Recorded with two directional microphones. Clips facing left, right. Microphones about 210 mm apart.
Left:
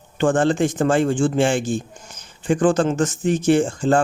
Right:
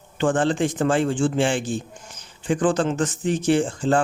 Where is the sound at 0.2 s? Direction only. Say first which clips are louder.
Left 3 dB; 45° left (ahead or behind).